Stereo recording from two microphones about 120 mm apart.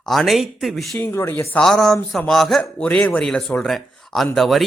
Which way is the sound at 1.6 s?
5° left (ahead or behind).